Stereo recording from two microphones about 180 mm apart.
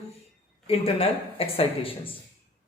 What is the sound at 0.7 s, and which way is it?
A man's voice, 30° left (ahead or behind).